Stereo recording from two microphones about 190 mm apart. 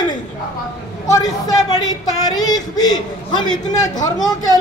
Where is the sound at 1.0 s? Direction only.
20° left (ahead or behind).